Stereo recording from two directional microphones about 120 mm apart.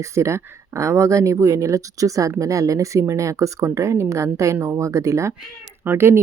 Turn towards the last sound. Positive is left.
turn(degrees=-20)  # may be behind; listen again after turning